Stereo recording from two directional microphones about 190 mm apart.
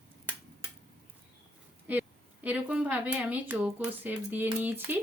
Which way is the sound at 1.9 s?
10° right (ahead or behind).